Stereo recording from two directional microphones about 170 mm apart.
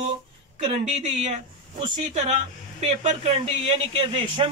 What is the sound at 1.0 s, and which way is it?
Speech, 40° right (ahead or behind).